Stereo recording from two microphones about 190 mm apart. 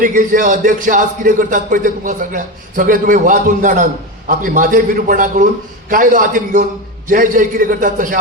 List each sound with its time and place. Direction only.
0.0 s a man's voice: 45° right (ahead or behind)